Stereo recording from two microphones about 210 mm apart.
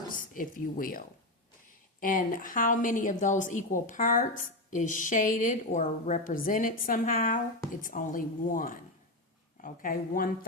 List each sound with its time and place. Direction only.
0.2 s a woman's voice: 40° left (ahead or behind)